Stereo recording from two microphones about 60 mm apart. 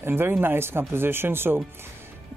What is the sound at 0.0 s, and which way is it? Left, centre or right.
Speech, right.